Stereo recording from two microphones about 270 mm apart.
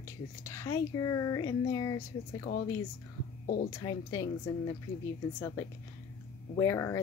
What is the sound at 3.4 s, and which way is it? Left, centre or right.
Speech, left.